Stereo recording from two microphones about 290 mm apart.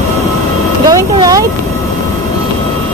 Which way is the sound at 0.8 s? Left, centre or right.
Centre.